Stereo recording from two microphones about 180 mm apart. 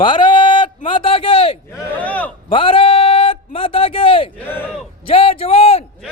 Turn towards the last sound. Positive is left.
turn(degrees=35)  # may be behind; listen again after turning